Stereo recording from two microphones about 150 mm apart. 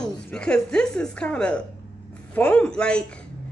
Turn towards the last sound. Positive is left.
turn(degrees=5)  # may be behind; listen again after turning